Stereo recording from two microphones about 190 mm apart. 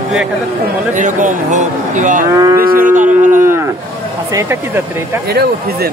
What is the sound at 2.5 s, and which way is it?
Speech, 50° right (ahead or behind).